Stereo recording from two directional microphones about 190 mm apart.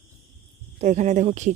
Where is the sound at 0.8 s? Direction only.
40° right (ahead or behind).